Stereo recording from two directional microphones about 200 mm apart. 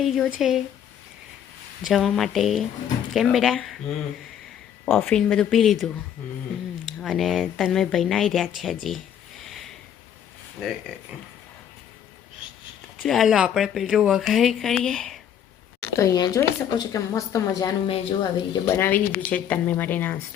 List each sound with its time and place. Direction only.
0.0 s speech: centre (ahead or behind)
1.8 s speech: centre (ahead or behind)
4.9 s speech: 5° left (ahead or behind)
7.0 s speech: centre (ahead or behind)
13.0 s speech: centre (ahead or behind)
15.8 s speech: 15° left (ahead or behind)